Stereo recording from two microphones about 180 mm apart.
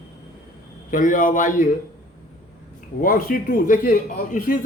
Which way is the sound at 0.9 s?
45° left (ahead or behind).